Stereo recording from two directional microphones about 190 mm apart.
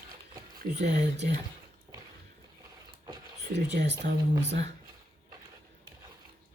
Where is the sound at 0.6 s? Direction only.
55° right (ahead or behind).